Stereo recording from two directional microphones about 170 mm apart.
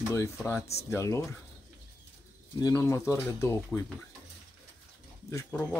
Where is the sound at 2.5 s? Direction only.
20° left (ahead or behind).